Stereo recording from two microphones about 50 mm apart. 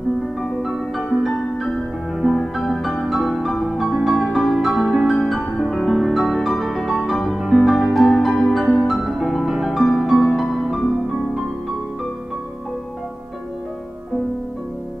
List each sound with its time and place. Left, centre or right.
0.6 s music: centre